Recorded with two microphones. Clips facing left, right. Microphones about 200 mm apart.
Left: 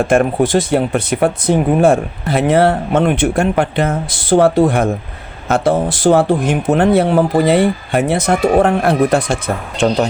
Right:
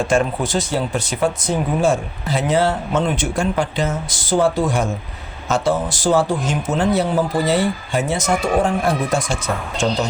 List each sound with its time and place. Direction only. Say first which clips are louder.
0.0 s speech: left 6 dB; 55° left (ahead or behind)